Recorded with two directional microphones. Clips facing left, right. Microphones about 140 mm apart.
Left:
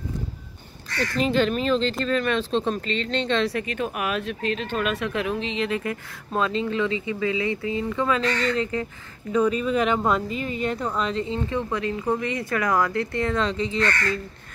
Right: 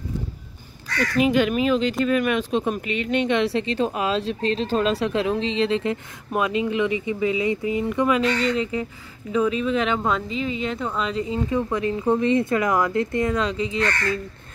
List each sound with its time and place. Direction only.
1.1 s speech: 10° right (ahead or behind)
11.3 s speech: 15° right (ahead or behind)